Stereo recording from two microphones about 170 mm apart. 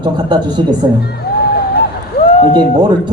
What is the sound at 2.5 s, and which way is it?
Speech, 25° right (ahead or behind).